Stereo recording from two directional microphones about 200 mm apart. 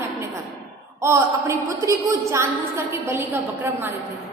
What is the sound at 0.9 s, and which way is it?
A woman's voice, 15° right (ahead or behind).